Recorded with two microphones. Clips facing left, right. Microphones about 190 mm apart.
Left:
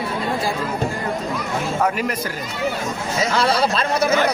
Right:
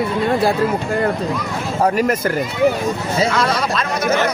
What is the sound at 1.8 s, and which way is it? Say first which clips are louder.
Speech: right 9 dB; 45° right (ahead or behind).